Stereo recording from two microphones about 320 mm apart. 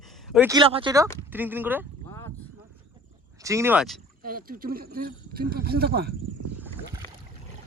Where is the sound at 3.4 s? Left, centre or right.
Centre.